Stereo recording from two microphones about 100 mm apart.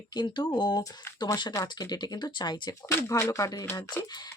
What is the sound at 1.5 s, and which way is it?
Speech, 40° left (ahead or behind).